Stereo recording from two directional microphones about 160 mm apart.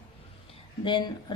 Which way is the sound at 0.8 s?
30° left (ahead or behind).